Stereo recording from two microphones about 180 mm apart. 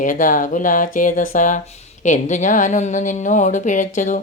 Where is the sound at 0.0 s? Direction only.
45° left (ahead or behind).